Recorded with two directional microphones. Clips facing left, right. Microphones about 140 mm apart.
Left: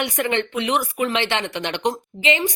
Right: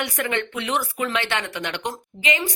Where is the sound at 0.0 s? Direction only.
20° left (ahead or behind).